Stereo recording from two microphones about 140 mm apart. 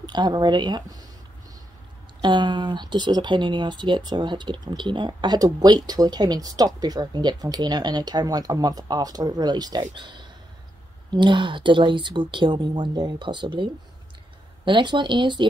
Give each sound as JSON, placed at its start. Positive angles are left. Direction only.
{"t": 0.0, "sound": "speech", "side_deg": -30}
{"t": 2.2, "sound": "speech", "side_deg": -35}